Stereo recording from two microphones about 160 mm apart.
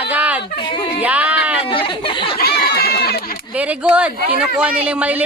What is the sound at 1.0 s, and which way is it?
Speech, 10° right (ahead or behind).